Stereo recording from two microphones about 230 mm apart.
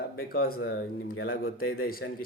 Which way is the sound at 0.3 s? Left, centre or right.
Left.